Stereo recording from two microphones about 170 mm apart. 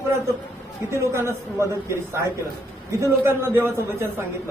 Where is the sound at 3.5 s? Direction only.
15° right (ahead or behind).